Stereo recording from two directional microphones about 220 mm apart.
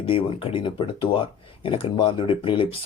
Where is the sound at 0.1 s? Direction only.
25° left (ahead or behind).